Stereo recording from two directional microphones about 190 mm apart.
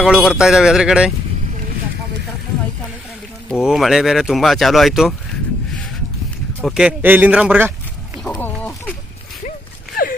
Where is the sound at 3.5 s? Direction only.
Centre (ahead or behind).